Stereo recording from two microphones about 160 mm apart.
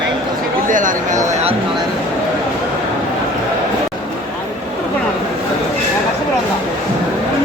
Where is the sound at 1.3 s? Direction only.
40° right (ahead or behind).